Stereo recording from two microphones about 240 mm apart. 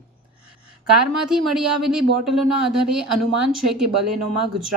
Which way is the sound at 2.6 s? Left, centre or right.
Right.